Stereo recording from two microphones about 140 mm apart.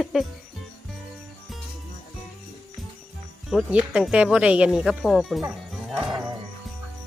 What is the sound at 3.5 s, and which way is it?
Speech, 5° right (ahead or behind).